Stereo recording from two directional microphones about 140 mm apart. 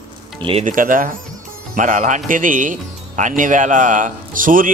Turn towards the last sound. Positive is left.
turn(degrees=-75)  # may be behind; listen again after turning